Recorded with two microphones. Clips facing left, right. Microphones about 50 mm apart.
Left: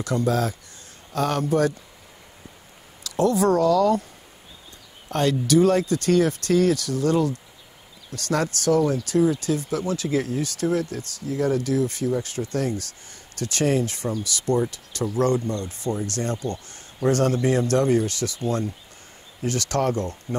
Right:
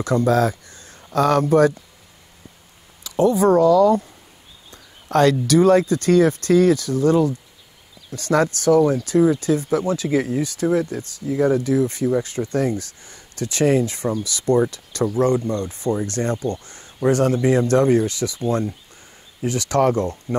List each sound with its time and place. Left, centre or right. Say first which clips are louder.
0.0 s speech: right 5 dB; right
0.3 s speech: right 6 dB; right
3.0 s speech: right 4 dB; right
5.1 s speech: right 7 dB; right
5.5 s speech: even; right